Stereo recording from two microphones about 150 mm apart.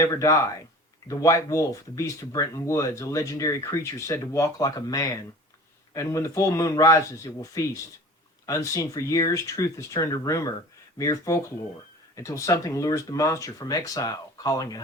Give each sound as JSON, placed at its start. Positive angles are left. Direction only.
{"t": 0.0, "sound": "speech", "side_deg": 20}